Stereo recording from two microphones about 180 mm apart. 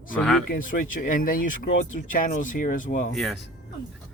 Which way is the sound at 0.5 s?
50° left (ahead or behind).